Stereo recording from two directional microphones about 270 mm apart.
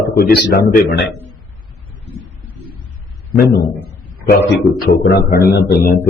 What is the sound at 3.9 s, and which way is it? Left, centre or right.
A man's voice, left.